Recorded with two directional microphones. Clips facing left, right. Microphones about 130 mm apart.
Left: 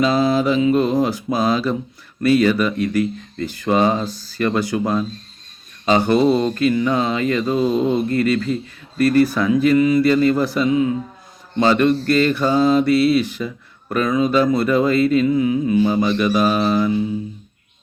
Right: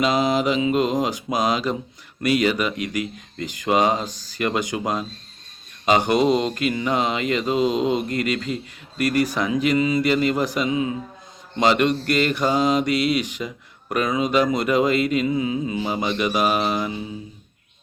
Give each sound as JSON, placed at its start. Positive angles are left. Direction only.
{"t": 0.0, "sound": "speech", "side_deg": -15}